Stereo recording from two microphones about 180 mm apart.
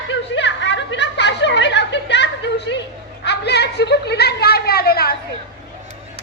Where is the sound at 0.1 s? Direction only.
80° left.